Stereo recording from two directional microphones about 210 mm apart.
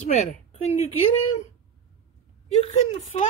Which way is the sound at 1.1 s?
90° left.